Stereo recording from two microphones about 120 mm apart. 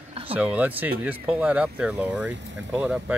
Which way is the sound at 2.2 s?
20° right (ahead or behind).